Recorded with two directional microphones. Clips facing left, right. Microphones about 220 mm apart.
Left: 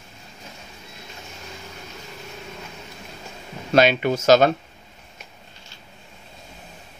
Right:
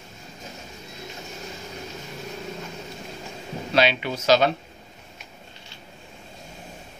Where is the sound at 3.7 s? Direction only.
45° left (ahead or behind).